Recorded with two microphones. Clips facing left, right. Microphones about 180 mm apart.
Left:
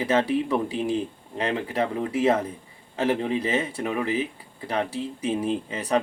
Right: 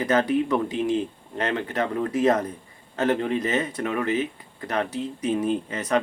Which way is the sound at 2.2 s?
5° left (ahead or behind).